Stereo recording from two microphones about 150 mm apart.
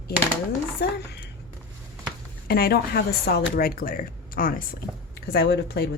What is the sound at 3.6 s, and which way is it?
Speech, 70° left (ahead or behind).